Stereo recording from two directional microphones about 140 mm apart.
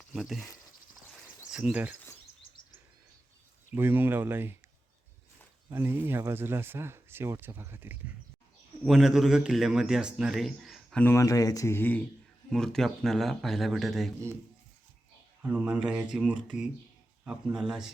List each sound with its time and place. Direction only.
0.1 s speech: centre (ahead or behind)
1.5 s speech: 5° right (ahead or behind)
3.8 s speech: 15° right (ahead or behind)
5.7 s speech: 15° right (ahead or behind)
8.8 s speech: 5° right (ahead or behind)
11.0 s speech: 20° left (ahead or behind); by 14.1 s centre (ahead or behind)
15.4 s speech: 10° right (ahead or behind)